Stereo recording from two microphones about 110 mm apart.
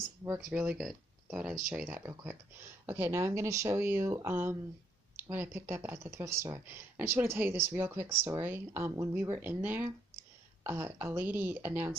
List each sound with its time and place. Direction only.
0.5 s speech: 10° right (ahead or behind)